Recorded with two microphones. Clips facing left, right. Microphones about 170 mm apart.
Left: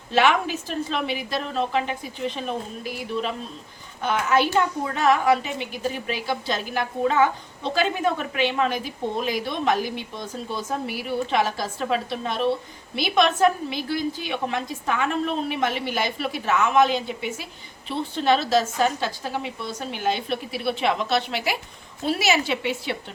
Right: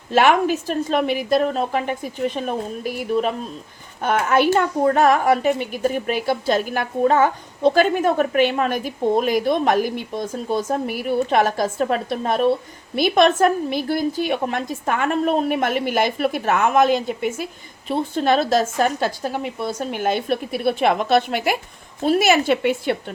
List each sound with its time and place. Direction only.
0.1 s a woman's voice: 45° right (ahead or behind)